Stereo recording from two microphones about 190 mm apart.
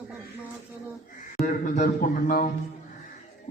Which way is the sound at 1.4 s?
40° left (ahead or behind).